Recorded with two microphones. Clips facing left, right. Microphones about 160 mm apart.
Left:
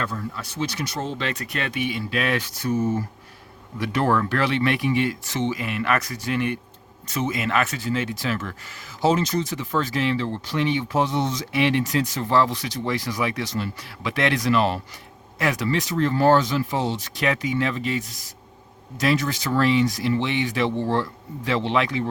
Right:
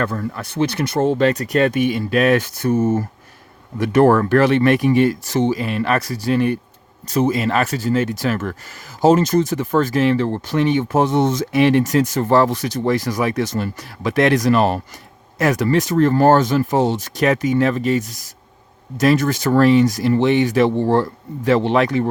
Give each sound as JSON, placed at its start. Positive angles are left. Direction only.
{"t": 0.0, "sound": "speech", "side_deg": -55}
{"t": 3.9, "sound": "speech", "side_deg": -45}